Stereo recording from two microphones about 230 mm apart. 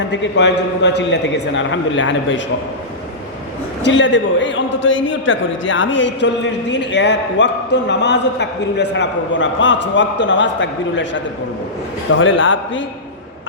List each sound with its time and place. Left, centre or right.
0.1 s a man's voice: left
3.8 s a man's voice: left